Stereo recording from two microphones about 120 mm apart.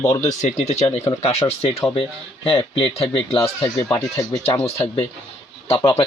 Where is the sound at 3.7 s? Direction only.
5° left (ahead or behind).